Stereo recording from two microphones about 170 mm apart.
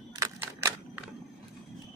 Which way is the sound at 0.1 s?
15° right (ahead or behind).